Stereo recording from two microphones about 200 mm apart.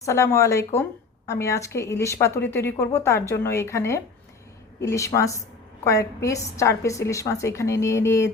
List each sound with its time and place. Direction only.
0.0 s a woman's voice: 15° left (ahead or behind)